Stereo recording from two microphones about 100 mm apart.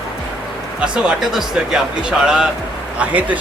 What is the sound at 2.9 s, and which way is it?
Speech, 15° right (ahead or behind).